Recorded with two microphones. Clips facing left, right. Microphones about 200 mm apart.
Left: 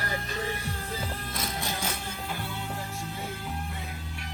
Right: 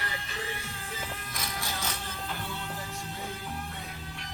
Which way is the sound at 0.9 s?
25° left (ahead or behind).